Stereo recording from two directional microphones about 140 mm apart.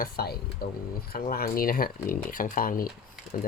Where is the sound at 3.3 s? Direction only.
75° left (ahead or behind).